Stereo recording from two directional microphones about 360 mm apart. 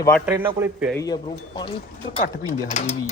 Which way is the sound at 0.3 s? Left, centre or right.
Centre.